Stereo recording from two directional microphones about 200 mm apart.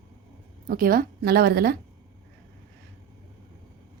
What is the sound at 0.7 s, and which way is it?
A woman's voice, 45° right (ahead or behind).